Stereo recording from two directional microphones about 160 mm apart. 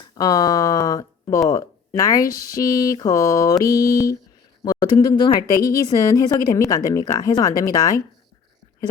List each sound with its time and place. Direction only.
0.2 s a woman's voice: 20° left (ahead or behind)